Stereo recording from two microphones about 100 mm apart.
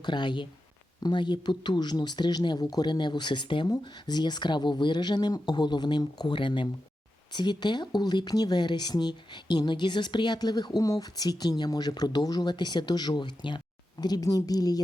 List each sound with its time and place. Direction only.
0.0 s speech: 50° left (ahead or behind)
14.0 s a woman's voice: 40° left (ahead or behind)